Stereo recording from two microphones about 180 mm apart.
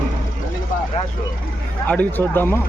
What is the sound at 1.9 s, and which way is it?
Speech, 10° left (ahead or behind).